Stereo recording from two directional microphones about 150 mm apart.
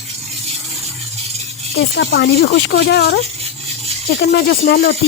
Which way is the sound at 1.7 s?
90° left.